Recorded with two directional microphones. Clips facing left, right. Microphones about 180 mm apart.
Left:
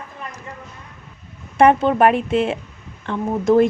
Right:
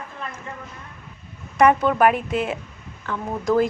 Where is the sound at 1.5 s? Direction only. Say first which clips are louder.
Left 3 dB; 25° left (ahead or behind).